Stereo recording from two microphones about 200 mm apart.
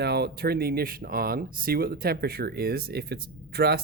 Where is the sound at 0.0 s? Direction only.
55° right (ahead or behind).